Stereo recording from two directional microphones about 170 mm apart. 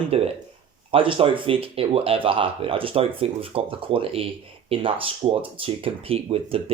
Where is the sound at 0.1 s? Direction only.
35° right (ahead or behind).